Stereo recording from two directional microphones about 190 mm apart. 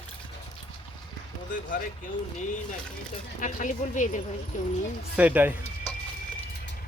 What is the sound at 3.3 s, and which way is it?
Speech, 45° left (ahead or behind).